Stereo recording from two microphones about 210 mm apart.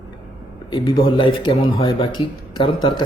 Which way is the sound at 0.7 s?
25° left (ahead or behind).